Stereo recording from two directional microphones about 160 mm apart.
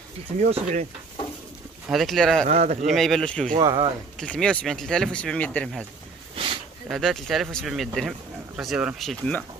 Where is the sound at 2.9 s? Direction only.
Centre (ahead or behind).